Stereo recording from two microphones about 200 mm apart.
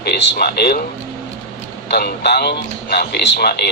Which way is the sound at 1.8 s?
55° left (ahead or behind).